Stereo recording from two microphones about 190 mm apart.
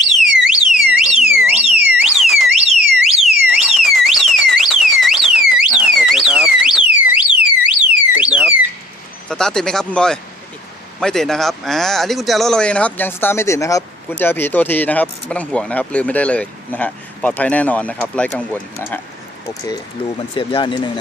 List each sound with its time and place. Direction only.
0.2 s alarm: centre (ahead or behind)
3.5 s alarm: centre (ahead or behind)
9.3 s speech: 5° left (ahead or behind)
19.5 s speech: 20° left (ahead or behind)